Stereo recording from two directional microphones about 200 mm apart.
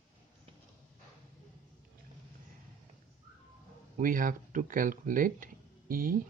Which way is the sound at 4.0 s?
45° right (ahead or behind).